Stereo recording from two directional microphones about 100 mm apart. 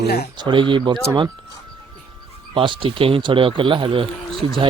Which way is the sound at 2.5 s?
55° right (ahead or behind).